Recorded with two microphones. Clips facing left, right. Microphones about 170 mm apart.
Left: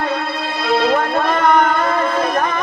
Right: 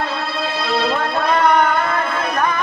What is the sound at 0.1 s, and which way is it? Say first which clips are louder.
Music: left 1 dB; 55° left (ahead or behind).